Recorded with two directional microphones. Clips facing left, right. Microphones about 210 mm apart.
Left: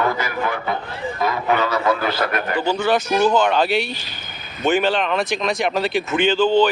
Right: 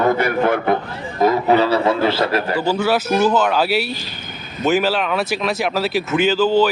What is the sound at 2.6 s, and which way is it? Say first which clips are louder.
Speech: left 2 dB; 5° right (ahead or behind).